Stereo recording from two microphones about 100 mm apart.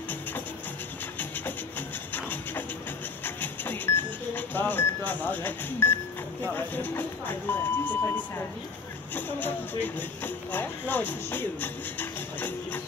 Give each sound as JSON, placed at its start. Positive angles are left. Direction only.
{"t": 3.3, "sound": "a sound", "side_deg": 20}
{"t": 6.4, "sound": "speech", "side_deg": 20}
{"t": 9.1, "sound": "speech", "side_deg": 20}